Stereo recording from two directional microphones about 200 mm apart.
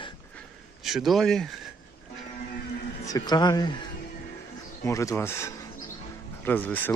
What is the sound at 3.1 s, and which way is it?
Speech, 20° left (ahead or behind).